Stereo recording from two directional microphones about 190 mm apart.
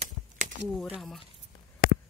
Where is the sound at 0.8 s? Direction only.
Centre (ahead or behind).